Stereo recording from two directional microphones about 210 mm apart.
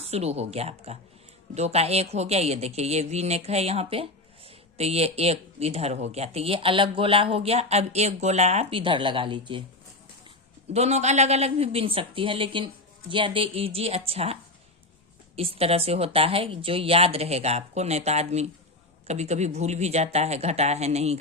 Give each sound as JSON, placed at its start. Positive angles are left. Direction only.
{"t": 0.0, "sound": "speech", "side_deg": -30}
{"t": 10.7, "sound": "speech", "side_deg": -30}
{"t": 15.4, "sound": "speech", "side_deg": -30}